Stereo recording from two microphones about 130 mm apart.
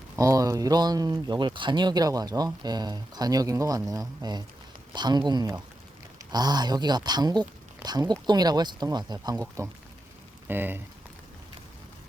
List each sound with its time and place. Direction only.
0.2 s speech: 25° right (ahead or behind)
10.5 s speech: 15° right (ahead or behind)